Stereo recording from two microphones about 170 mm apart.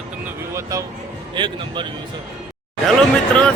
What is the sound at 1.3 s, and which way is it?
Speech, 30° right (ahead or behind).